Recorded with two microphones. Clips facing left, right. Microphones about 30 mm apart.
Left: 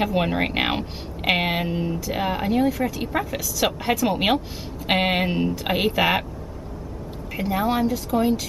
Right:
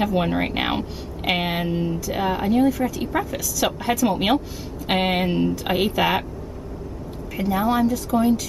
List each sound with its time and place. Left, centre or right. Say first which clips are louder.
0.0 s speech: right 1 dB; centre
7.4 s speech: right 2 dB; centre